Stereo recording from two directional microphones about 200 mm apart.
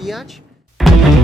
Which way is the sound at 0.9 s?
Centre (ahead or behind).